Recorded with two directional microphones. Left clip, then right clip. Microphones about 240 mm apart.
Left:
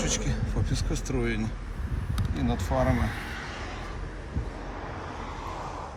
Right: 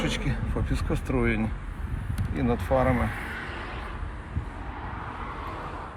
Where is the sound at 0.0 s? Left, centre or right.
Centre.